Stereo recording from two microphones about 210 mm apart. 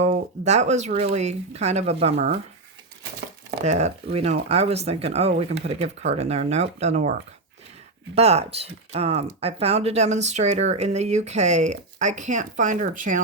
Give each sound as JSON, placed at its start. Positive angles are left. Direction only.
{"t": 0.0, "sound": "speech", "side_deg": -30}
{"t": 3.6, "sound": "speech", "side_deg": -30}